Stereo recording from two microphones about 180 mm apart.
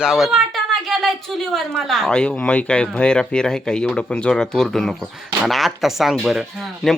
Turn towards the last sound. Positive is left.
turn(degrees=0)  # may be behind; listen again after turning